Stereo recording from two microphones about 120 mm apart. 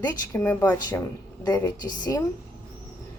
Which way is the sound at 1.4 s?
30° left (ahead or behind).